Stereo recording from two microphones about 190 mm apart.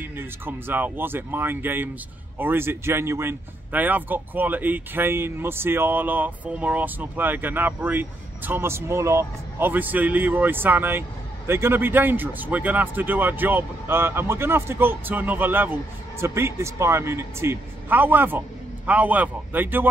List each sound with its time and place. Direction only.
0.0 s speech: 10° right (ahead or behind)